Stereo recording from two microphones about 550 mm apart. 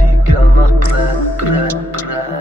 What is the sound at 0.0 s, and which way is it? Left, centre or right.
Music, right.